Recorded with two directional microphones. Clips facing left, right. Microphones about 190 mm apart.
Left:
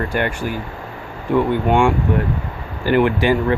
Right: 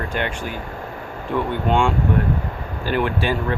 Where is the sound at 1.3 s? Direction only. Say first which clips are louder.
Left 5 dB; 10° left (ahead or behind).